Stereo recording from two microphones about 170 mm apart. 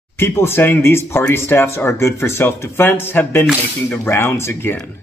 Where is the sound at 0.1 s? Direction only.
15° left (ahead or behind).